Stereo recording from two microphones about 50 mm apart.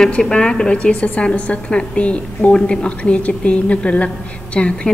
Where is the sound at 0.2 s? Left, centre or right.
Centre.